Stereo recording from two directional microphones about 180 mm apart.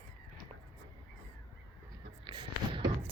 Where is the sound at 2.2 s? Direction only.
30° right (ahead or behind).